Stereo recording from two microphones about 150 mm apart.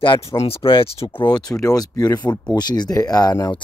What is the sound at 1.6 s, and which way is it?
Speech, 25° left (ahead or behind).